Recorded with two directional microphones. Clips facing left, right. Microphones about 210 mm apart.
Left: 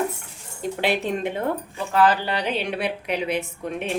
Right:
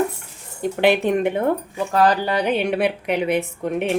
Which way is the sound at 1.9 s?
40° right (ahead or behind).